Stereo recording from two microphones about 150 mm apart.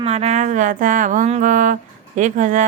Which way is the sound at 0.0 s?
45° right (ahead or behind).